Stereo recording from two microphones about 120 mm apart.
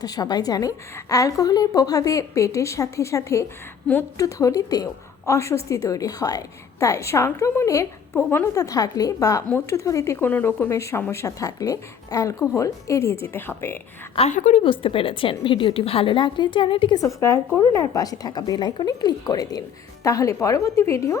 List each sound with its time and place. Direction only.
0.0 s a woman's voice: 35° left (ahead or behind); by 13.7 s 20° left (ahead or behind)
14.2 s a woman's voice: 80° left
14.6 s a woman's voice: 45° left (ahead or behind)
17.0 s a woman's voice: 25° left (ahead or behind)